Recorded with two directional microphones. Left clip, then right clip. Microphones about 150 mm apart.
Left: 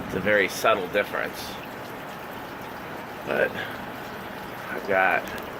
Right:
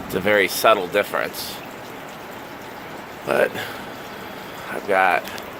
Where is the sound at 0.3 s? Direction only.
35° right (ahead or behind).